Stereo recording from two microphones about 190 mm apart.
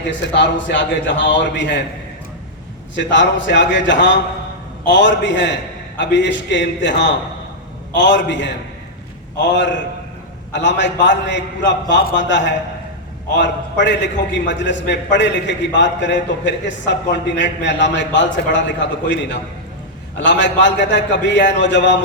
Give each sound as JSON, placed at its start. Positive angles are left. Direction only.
{"t": 0.1, "sound": "a man's voice", "side_deg": 70}
{"t": 2.9, "sound": "a man's voice", "side_deg": 70}
{"t": 20.2, "sound": "a man's voice", "side_deg": 70}